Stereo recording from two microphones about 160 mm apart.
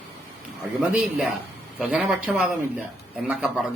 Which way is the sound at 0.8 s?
5° right (ahead or behind).